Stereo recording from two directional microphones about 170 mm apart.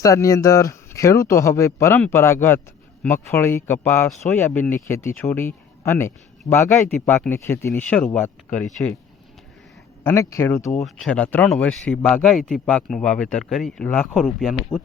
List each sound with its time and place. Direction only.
0.0 s speech: 20° left (ahead or behind)
10.0 s speech: 15° left (ahead or behind)
10.8 s speech: 5° left (ahead or behind)